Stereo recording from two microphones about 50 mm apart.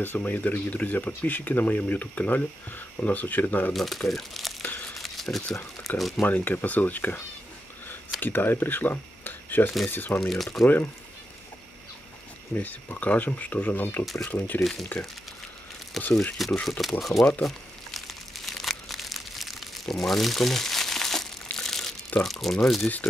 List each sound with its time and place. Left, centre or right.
0.0 s speech: left
3.7 s speech: centre
4.9 s a sound: centre
5.9 s speech: centre
6.2 s speech: left
8.2 s speech: left
10.2 s speech: centre
12.5 s speech: left
14.6 s speech: centre
16.0 s speech: centre
17.4 s crumpling: centre
22.2 s speech: centre